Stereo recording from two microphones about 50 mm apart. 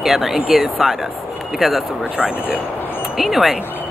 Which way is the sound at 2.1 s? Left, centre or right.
Right.